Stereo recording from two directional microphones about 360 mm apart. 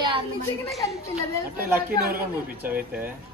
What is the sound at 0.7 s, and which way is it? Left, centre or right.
Speech, centre.